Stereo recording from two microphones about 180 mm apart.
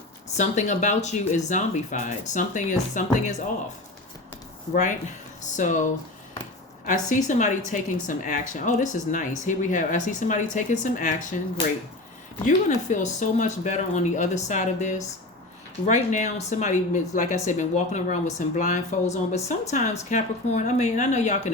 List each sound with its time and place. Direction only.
0.3 s a woman's voice: 40° left (ahead or behind)
4.7 s a woman's voice: 45° left (ahead or behind)
6.8 s a woman's voice: 45° left (ahead or behind)
12.5 s a woman's voice: 45° left (ahead or behind)